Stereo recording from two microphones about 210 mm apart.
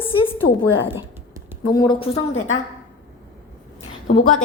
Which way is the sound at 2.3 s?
70° left (ahead or behind).